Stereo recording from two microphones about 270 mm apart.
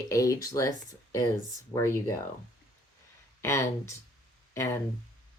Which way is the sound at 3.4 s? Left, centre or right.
Centre.